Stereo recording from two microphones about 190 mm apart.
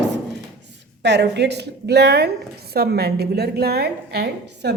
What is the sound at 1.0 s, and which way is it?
A woman's voice, 65° right (ahead or behind).